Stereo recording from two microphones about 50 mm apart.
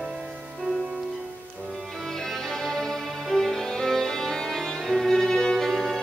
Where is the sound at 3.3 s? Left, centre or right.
Centre.